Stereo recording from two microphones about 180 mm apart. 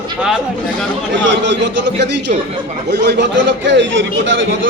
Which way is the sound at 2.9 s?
70° right (ahead or behind).